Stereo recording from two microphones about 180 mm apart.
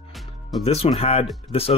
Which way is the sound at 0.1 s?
Centre (ahead or behind).